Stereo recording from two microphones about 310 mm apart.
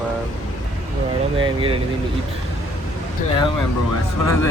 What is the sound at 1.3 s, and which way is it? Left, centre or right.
Speech, centre.